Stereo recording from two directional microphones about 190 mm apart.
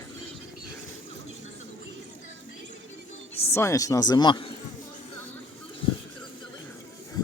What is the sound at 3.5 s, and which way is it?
Speech, 15° left (ahead or behind).